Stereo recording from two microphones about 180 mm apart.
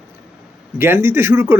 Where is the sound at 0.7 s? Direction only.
10° right (ahead or behind).